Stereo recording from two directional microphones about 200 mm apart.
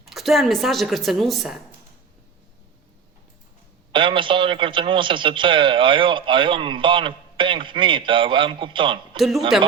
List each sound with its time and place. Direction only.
0.0 s a woman's voice: centre (ahead or behind)
3.9 s a man's voice: 25° right (ahead or behind)
9.1 s a woman's voice: centre (ahead or behind)